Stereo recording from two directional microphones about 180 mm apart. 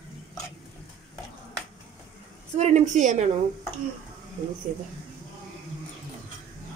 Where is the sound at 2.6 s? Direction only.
40° right (ahead or behind).